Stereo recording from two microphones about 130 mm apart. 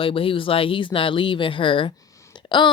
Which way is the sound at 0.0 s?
45° left (ahead or behind).